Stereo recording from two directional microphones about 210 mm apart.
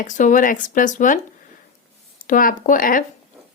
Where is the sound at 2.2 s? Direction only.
40° left (ahead or behind).